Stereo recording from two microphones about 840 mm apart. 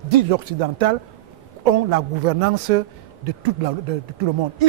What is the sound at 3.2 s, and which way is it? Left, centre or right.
Speech, right.